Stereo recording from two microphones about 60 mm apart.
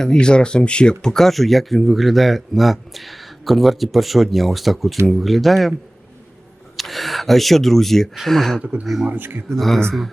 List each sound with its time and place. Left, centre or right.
0.0 s speech: centre
6.7 s speech: centre
9.0 s speech: right
9.5 s speech: centre